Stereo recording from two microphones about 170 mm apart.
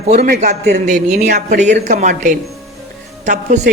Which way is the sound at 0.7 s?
50° right (ahead or behind).